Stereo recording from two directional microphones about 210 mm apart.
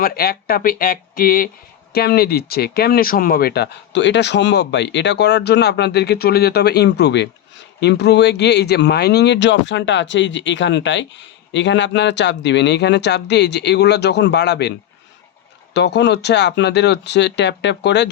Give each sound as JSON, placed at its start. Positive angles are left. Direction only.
{"t": 0.0, "sound": "speech", "side_deg": 45}
{"t": 15.7, "sound": "speech", "side_deg": 55}